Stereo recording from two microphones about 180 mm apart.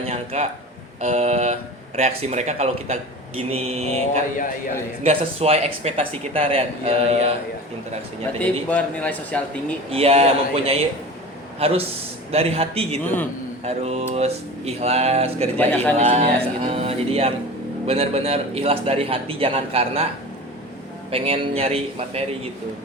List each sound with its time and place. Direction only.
0.1 s speech: 40° right (ahead or behind)
8.4 s speech: 10° left (ahead or behind)
9.9 s speech: 35° right (ahead or behind)
15.5 s speech: 10° left (ahead or behind)
16.0 s speech: 35° right (ahead or behind)
21.1 s speech: 30° right (ahead or behind)